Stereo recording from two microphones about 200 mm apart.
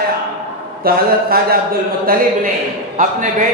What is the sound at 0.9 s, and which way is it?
A man's voice, 50° right (ahead or behind).